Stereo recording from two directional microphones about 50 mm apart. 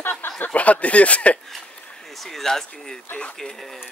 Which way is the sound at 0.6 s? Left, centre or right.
Left.